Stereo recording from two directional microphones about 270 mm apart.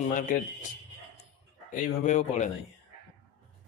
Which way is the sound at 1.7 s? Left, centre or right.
Left.